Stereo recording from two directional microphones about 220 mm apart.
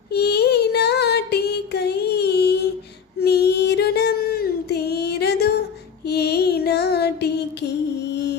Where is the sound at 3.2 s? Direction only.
50° left (ahead or behind).